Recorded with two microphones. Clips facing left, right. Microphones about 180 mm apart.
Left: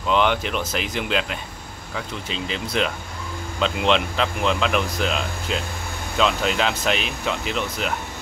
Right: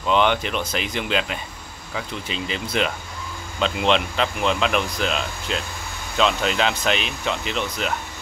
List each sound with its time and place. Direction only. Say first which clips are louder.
0.0 s speech: right 1 dB; centre (ahead or behind)